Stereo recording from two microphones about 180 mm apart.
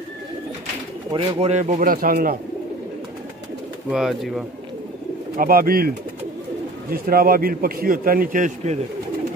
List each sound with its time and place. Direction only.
1.1 s speech: 35° right (ahead or behind); by 2.3 s 50° right (ahead or behind)
3.9 s speech: centre (ahead or behind)
5.4 s a man's voice: 55° right (ahead or behind)